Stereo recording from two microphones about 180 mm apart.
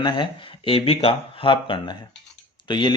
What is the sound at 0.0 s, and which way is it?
Speech, 30° left (ahead or behind).